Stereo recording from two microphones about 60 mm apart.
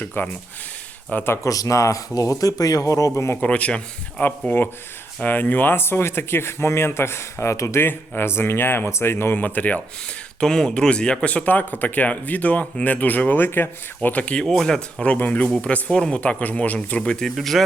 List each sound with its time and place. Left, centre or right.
0.0 s speech: left
1.5 s speech: left
3.4 s speech: left
4.2 s speech: left
7.8 s speech: left
9.4 s speech: left
10.4 s speech: centre
14.4 s speech: centre
15.0 s speech: left
16.2 s speech: left
17.3 s speech: centre